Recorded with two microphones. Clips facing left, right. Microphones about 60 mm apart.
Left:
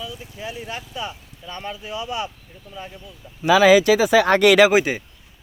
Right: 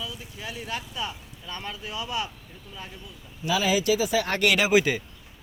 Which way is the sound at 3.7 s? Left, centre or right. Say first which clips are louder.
Left 8 dB; left.